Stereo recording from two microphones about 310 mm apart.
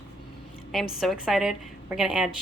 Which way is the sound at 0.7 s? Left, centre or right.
Centre.